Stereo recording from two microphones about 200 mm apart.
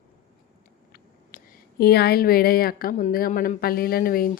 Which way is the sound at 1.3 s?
50° left (ahead or behind).